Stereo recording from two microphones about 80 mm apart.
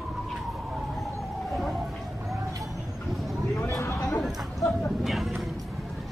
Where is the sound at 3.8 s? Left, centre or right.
Left.